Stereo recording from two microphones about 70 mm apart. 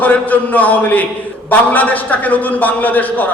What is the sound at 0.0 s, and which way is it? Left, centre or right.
A man's voice, left.